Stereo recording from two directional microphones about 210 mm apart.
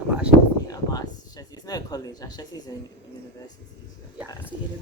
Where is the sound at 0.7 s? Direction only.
15° left (ahead or behind).